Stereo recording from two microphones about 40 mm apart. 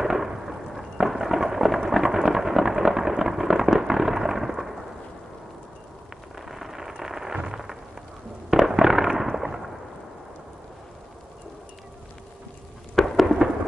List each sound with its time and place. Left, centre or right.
0.0 s thunder: centre
6.3 s rain: centre
7.4 s a sound: centre
8.5 s fireworks: centre
12.9 s thunder: centre